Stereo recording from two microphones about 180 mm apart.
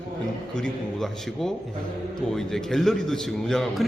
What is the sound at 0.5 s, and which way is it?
A man's voice, 5° left (ahead or behind).